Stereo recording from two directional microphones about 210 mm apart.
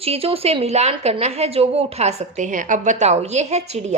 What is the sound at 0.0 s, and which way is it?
A woman's voice, 30° right (ahead or behind).